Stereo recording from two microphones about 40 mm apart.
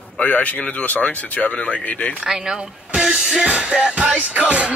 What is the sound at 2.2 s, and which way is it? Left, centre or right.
Speech, centre.